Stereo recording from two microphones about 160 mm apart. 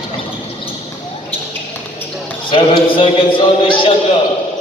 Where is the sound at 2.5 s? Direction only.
30° left (ahead or behind).